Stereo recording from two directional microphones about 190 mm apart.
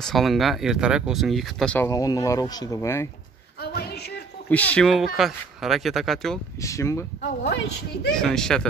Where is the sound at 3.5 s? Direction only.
55° left (ahead or behind).